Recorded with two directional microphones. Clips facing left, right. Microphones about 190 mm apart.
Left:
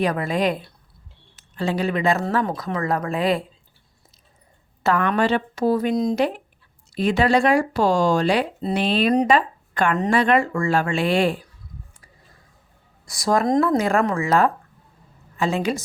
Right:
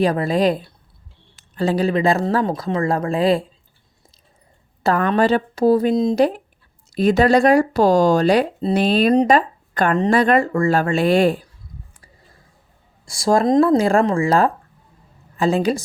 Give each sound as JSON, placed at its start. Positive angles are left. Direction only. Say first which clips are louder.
{"t": 0.0, "sound": "speech", "louder": "right 4 dB", "side_deg": -35}
{"t": 4.8, "sound": "speech", "louder": "right 3 dB", "side_deg": -35}
{"t": 6.1, "sound": "speech", "louder": "right 5 dB", "side_deg": -40}
{"t": 13.1, "sound": "speech", "louder": "right 4 dB", "side_deg": -30}